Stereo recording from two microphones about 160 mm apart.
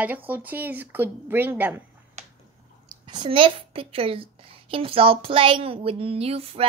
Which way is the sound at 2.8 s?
30° right (ahead or behind).